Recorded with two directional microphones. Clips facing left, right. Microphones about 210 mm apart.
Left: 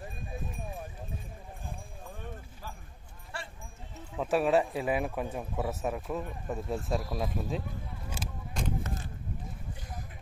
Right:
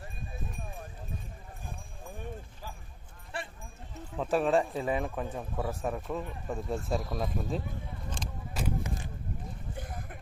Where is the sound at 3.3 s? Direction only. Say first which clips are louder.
Right 3 dB; 15° right (ahead or behind).